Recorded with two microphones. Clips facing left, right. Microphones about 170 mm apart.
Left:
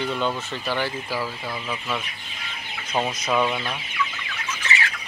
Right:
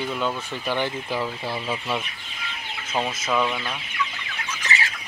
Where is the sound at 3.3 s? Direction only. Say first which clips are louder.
Left 1 dB; 10° left (ahead or behind).